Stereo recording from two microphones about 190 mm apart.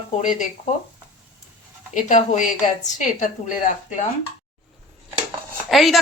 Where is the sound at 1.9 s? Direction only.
40° left (ahead or behind).